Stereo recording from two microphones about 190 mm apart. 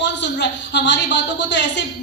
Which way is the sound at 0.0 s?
65° left (ahead or behind).